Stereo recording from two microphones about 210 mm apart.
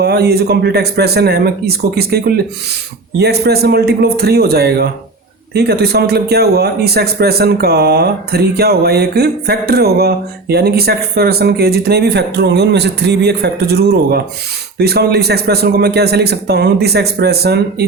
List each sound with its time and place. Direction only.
0.0 s a man's voice: 50° right (ahead or behind)
14.8 s a man's voice: 50° right (ahead or behind)